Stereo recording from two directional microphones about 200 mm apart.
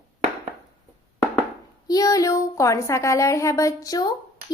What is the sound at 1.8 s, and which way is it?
A woman's voice, 20° left (ahead or behind).